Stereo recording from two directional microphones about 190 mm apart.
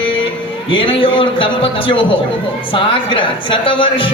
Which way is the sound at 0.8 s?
25° left (ahead or behind).